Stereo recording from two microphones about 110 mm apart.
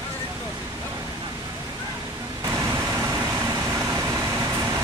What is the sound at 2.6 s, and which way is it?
Vehicle, 25° right (ahead or behind).